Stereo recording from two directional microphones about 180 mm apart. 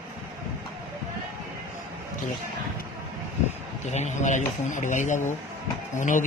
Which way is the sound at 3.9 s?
40° left (ahead or behind).